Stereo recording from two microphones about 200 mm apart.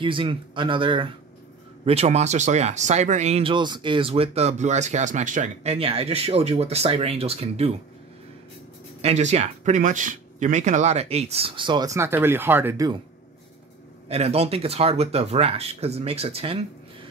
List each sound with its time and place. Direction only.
0.0 s speech: 25° right (ahead or behind)
9.0 s speech: 35° right (ahead or behind); by 13.0 s 15° right (ahead or behind)
14.0 s speech: 30° right (ahead or behind)